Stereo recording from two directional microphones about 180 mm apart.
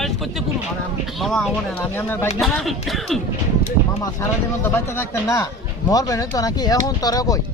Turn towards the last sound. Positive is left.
turn(degrees=20)  # may be behind; listen again after turning